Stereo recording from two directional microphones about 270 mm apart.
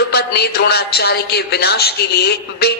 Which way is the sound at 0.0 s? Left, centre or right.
Left.